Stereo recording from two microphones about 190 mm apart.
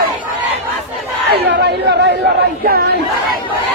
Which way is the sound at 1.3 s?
60° right (ahead or behind).